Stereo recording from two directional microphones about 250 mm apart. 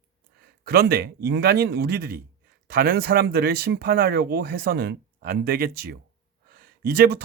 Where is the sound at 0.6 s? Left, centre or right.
Right.